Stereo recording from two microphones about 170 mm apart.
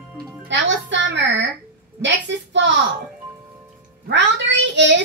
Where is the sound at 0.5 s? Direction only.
90° right.